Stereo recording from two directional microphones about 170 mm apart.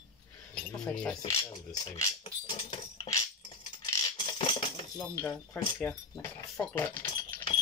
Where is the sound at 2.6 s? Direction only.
25° left (ahead or behind).